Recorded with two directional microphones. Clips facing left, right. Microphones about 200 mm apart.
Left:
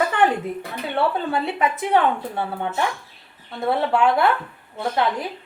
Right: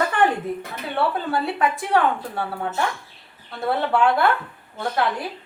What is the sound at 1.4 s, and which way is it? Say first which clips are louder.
A woman's voice: even; 20° left (ahead or behind).